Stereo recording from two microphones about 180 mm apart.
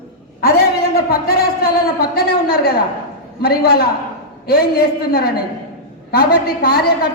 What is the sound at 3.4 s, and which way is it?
A man's voice, 60° left (ahead or behind).